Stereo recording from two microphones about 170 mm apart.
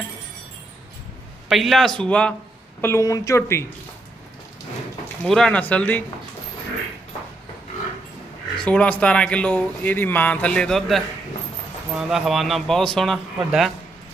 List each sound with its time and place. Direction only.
1.5 s a man's voice: centre (ahead or behind)
2.8 s speech: 15° left (ahead or behind)
5.2 s speech: centre (ahead or behind)
8.5 s a man's voice: 5° left (ahead or behind)